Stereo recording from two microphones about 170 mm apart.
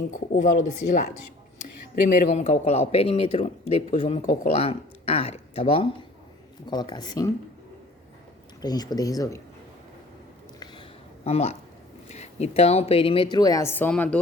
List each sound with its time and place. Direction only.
0.1 s speech: 45° left (ahead or behind); by 7.3 s 25° left (ahead or behind)
8.6 s speech: 25° left (ahead or behind)
10.6 s a sound: 35° left (ahead or behind)
12.0 s speech: 40° left (ahead or behind); by 14.2 s 10° left (ahead or behind)